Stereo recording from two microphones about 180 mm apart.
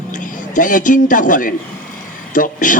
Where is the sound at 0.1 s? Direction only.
45° left (ahead or behind).